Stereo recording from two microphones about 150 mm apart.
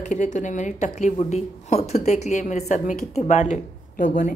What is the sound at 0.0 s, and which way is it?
A woman's voice, 55° left (ahead or behind).